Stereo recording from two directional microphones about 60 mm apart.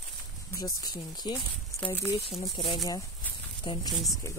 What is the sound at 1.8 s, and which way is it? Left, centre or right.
Speech, left.